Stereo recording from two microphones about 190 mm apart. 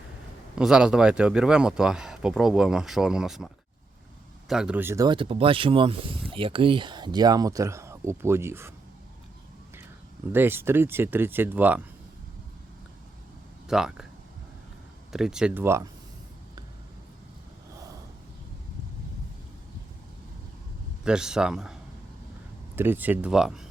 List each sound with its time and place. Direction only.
0.5 s speech: 5° right (ahead or behind)
10.3 s speech: 10° right (ahead or behind)
13.7 s speech: 5° right (ahead or behind)
15.1 s speech: 5° right (ahead or behind)
21.0 s speech: 5° right (ahead or behind)